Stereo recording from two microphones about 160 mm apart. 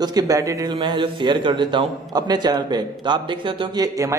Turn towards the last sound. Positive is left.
turn(degrees=-30)  # may be behind; listen again after turning